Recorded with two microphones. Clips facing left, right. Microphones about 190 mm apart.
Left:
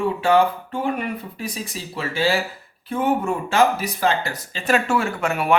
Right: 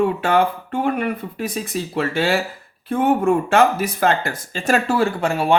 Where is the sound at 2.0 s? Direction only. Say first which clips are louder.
Right 2 dB; 55° right (ahead or behind).